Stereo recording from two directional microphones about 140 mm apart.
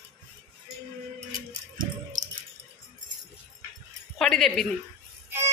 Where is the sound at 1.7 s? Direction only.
80° right.